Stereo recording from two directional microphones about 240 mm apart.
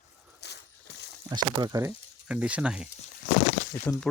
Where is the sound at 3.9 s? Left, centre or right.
Centre.